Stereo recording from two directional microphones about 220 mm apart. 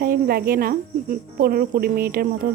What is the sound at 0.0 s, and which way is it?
Speech, 40° right (ahead or behind).